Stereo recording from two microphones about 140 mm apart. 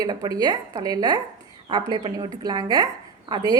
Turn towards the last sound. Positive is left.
turn(degrees=-30)  # may be behind; listen again after turning